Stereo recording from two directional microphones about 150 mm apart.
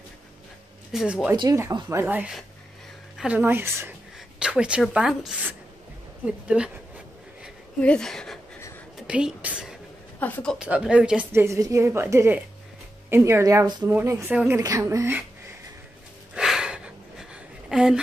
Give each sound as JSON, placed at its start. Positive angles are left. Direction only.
{"t": 0.9, "sound": "a woman's voice", "side_deg": -5}
{"t": 1.3, "sound": "speech", "side_deg": -30}
{"t": 1.9, "sound": "a woman's voice", "side_deg": -15}
{"t": 7.8, "sound": "speech", "side_deg": 5}
{"t": 10.2, "sound": "speech", "side_deg": 10}
{"t": 10.6, "sound": "a woman's voice", "side_deg": -5}
{"t": 14.3, "sound": "a woman's voice", "side_deg": -5}
{"t": 14.6, "sound": "speech", "side_deg": -20}
{"t": 16.3, "sound": "a sound", "side_deg": -5}